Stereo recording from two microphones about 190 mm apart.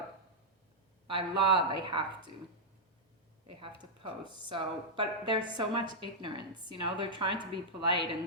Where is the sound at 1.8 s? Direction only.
25° right (ahead or behind).